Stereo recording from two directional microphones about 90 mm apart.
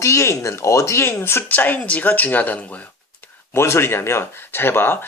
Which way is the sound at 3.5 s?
30° left (ahead or behind).